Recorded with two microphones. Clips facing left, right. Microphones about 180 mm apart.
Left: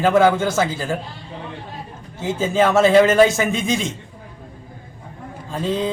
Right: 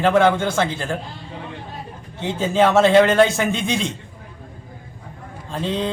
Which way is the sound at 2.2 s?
Centre (ahead or behind).